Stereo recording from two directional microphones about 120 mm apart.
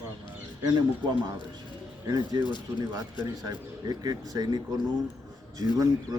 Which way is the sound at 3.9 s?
35° right (ahead or behind).